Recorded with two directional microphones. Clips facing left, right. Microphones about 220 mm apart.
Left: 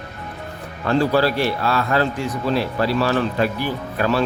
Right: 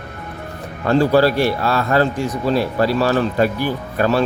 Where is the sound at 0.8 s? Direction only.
45° right (ahead or behind).